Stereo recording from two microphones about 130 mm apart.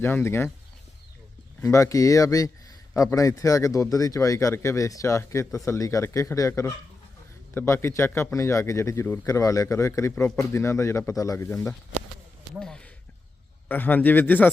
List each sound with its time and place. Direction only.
0.0 s speech: 20° left (ahead or behind)
1.6 s a man's voice: 25° left (ahead or behind)
12.5 s speech: 5° left (ahead or behind)